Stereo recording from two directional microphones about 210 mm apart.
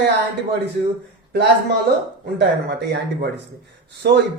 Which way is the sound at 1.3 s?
50° right (ahead or behind).